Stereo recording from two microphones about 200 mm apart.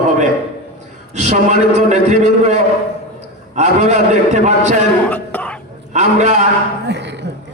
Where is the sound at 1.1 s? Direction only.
35° right (ahead or behind).